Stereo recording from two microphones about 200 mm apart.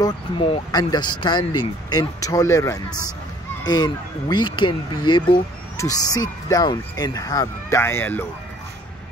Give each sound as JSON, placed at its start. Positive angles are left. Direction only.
{"t": 0.0, "sound": "speech", "side_deg": 25}